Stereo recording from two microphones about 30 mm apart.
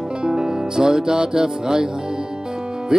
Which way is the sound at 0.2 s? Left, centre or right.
Right.